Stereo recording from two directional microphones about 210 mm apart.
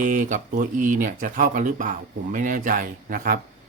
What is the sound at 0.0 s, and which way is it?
Speech, 40° right (ahead or behind).